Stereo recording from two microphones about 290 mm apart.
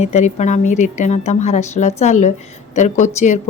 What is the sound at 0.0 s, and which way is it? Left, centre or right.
A woman's voice, left.